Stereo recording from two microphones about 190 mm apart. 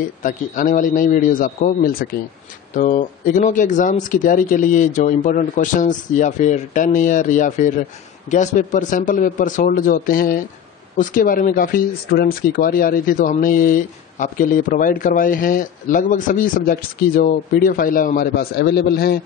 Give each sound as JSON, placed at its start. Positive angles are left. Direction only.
{"t": 0.2, "sound": "speech", "side_deg": 45}